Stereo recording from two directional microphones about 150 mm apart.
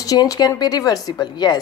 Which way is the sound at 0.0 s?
25° left (ahead or behind).